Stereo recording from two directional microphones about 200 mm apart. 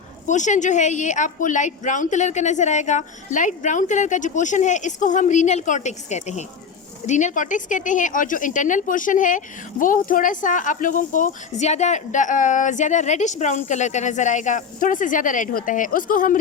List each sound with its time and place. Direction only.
0.3 s a woman's voice: 40° left (ahead or behind)